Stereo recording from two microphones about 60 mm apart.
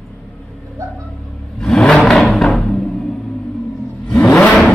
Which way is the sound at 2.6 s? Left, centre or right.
Centre.